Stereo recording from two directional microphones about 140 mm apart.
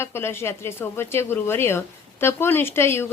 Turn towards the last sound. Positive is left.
turn(degrees=15)  # may be behind; listen again after turning